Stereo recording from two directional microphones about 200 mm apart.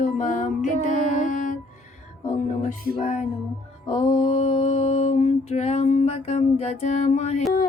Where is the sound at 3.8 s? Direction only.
25° left (ahead or behind).